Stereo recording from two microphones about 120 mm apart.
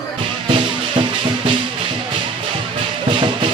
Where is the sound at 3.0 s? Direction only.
40° right (ahead or behind).